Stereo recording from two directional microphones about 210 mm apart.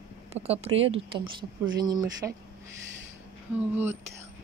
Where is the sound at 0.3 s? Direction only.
30° right (ahead or behind).